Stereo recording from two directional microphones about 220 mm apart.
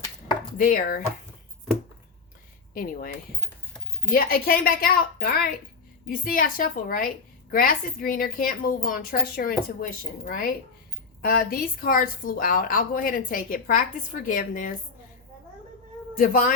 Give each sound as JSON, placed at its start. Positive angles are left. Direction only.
{"t": 0.5, "sound": "a woman's voice", "side_deg": 40}
{"t": 2.7, "sound": "a woman's voice", "side_deg": 40}
{"t": 16.1, "sound": "a woman's voice", "side_deg": 35}